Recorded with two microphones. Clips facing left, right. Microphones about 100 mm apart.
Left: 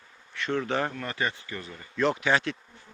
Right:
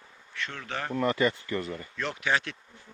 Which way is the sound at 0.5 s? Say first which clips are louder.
Left 10 dB; 30° left (ahead or behind).